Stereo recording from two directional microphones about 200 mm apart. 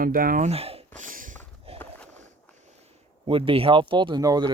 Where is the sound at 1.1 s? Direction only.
45° right (ahead or behind).